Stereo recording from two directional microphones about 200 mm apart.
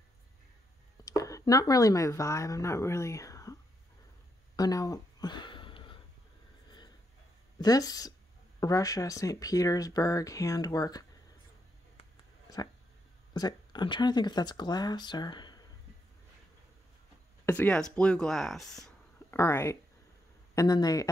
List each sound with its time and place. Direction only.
1.0 s speech: 15° left (ahead or behind)
4.6 s a sound: 20° left (ahead or behind)
7.6 s speech: 20° left (ahead or behind)
13.3 s speech: 20° left (ahead or behind)
17.5 s speech: 5° left (ahead or behind)
19.3 s speech: 15° left (ahead or behind)